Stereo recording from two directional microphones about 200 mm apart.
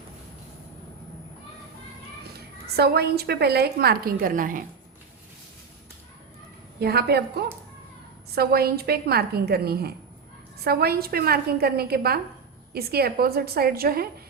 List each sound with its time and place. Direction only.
2.3 s a woman's voice: 55° right (ahead or behind)
6.7 s a woman's voice: 55° right (ahead or behind)